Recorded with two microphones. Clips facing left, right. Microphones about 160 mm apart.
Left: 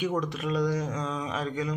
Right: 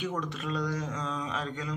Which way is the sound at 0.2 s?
15° left (ahead or behind).